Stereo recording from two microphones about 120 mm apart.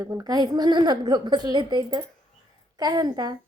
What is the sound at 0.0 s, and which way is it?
A woman's voice, 30° right (ahead or behind).